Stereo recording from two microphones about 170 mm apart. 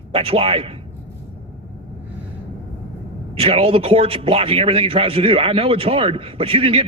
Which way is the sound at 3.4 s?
35° right (ahead or behind).